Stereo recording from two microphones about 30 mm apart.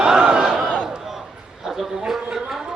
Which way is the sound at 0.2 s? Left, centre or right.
Right.